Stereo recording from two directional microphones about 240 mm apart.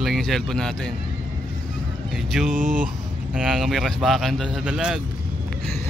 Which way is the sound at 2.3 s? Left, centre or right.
Centre.